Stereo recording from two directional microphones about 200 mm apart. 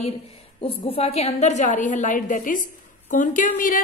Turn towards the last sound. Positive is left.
turn(degrees=45)  # may be behind; listen again after turning